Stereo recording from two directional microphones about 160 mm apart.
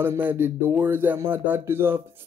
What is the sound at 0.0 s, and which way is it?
Speech, 15° right (ahead or behind).